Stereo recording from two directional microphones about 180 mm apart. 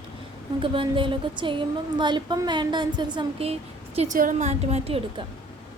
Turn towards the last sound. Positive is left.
turn(degrees=-35)  # may be behind; listen again after turning